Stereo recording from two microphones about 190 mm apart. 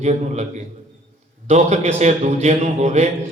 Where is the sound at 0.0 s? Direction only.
35° right (ahead or behind).